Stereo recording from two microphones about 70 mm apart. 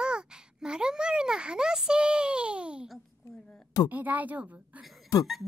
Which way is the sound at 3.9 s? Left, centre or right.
Right.